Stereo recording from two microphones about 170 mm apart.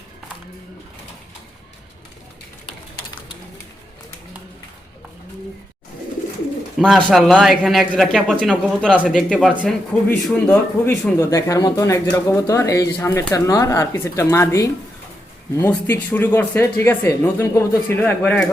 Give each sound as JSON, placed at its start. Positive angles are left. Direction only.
{"t": 6.7, "sound": "speech", "side_deg": 0}